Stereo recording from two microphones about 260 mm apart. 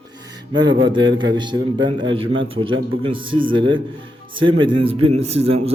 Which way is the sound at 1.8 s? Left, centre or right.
Right.